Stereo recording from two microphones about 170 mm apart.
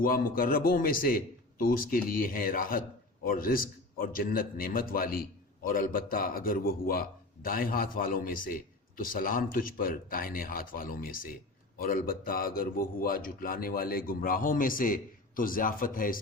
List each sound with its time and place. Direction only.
0.0 s a man's voice: 55° left (ahead or behind)